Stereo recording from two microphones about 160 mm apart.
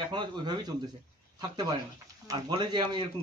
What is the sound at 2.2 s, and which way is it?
Speech, 25° right (ahead or behind).